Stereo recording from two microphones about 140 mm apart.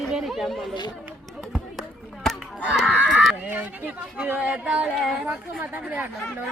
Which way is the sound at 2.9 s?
10° right (ahead or behind).